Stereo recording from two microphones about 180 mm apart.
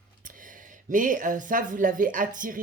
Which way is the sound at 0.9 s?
45° right (ahead or behind).